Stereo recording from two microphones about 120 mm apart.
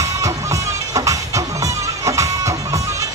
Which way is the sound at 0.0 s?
25° right (ahead or behind).